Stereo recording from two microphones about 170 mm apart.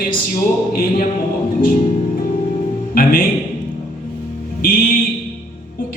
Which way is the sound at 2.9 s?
55° left (ahead or behind).